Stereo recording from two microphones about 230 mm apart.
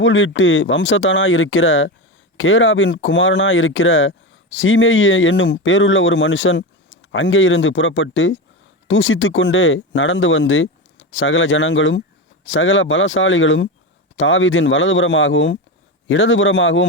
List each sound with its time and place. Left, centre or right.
0.0 s speech: left